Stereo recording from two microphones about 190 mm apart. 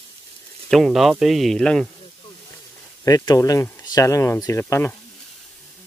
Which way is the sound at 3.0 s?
20° left (ahead or behind).